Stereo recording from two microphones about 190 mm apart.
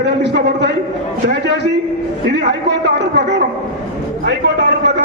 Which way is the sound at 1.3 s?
65° right (ahead or behind).